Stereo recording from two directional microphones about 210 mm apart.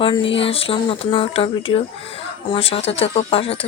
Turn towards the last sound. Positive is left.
turn(degrees=25)  # may be behind; listen again after turning